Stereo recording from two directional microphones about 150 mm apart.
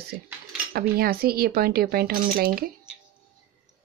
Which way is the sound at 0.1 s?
75° right (ahead or behind).